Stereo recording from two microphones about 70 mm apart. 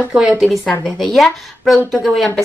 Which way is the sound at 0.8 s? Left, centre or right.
Centre.